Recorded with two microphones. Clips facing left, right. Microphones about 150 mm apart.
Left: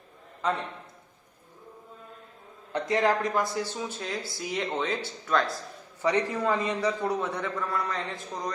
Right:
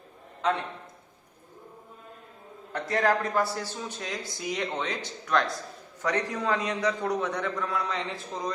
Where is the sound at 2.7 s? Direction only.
20° left (ahead or behind).